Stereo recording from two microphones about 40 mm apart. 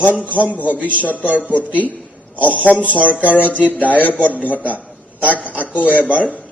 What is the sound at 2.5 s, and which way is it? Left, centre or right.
Speech, left.